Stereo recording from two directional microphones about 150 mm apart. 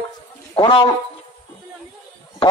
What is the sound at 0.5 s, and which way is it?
Speech, 35° left (ahead or behind).